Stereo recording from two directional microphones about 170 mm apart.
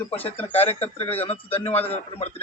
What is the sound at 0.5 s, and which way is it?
Speech, 35° left (ahead or behind).